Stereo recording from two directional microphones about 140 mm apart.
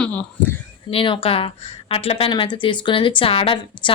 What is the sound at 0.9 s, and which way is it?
Speech, 40° left (ahead or behind).